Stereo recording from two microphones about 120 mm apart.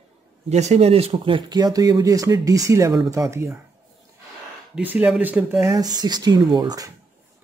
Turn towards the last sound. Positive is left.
turn(degrees=-35)  # may be behind; listen again after turning